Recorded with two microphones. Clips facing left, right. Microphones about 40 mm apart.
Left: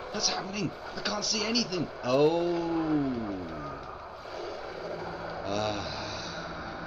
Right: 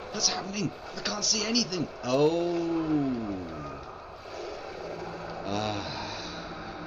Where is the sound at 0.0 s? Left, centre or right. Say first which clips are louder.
Even; centre.